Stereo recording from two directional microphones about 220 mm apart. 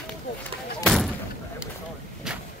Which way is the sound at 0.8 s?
Centre (ahead or behind).